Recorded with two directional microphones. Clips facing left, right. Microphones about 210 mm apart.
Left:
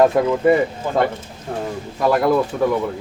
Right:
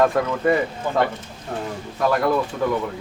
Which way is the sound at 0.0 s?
25° left (ahead or behind).